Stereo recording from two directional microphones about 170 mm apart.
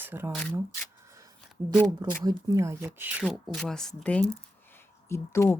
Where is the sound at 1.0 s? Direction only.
15° right (ahead or behind).